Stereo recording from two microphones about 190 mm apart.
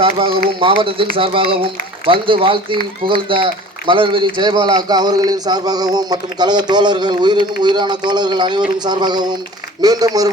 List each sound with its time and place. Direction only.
0.0 s a man's voice: 30° right (ahead or behind)